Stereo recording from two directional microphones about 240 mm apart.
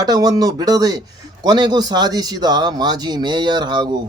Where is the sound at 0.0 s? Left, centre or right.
Centre.